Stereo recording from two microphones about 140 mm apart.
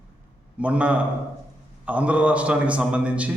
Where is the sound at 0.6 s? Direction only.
10° right (ahead or behind).